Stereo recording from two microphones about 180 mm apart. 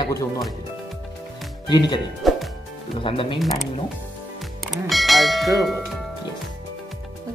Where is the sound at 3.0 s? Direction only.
30° left (ahead or behind).